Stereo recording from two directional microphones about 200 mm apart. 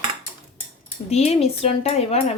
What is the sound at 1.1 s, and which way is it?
Speech, 30° left (ahead or behind).